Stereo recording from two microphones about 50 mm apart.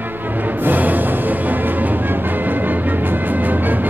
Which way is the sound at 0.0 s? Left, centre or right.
Right.